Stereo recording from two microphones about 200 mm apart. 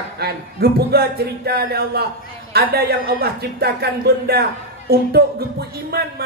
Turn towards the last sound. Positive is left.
turn(degrees=-50)  # may be behind; listen again after turning